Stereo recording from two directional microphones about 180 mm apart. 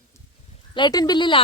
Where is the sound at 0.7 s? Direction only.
25° left (ahead or behind).